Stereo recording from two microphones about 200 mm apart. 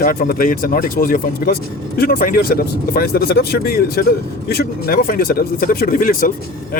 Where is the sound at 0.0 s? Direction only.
45° left (ahead or behind).